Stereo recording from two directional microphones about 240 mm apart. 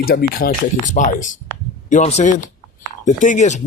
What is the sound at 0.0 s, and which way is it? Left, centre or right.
Speech, left.